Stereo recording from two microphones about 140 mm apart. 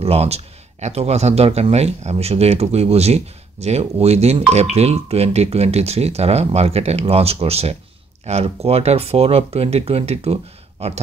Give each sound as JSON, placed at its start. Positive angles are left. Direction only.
{"t": 0.0, "sound": "speech", "side_deg": -45}